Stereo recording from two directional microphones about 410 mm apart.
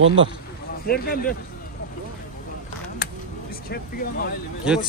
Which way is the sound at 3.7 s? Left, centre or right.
Left.